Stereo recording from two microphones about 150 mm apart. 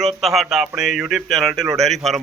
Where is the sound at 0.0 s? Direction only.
Centre (ahead or behind).